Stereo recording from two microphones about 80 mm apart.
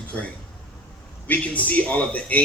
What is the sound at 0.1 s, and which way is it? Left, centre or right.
A man's voice, centre.